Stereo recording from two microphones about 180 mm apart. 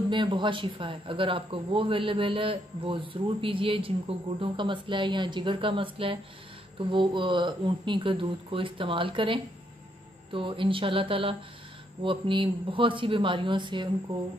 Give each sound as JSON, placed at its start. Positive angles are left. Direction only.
{"t": 0.1, "sound": "speech", "side_deg": -25}